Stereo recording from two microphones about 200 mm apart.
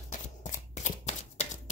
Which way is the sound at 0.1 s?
40° left (ahead or behind).